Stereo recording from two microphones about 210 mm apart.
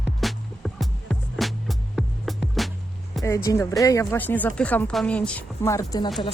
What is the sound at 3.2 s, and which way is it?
Speech, 15° left (ahead or behind).